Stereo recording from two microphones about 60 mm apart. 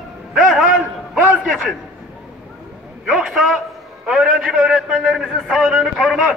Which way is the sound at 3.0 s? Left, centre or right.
Centre.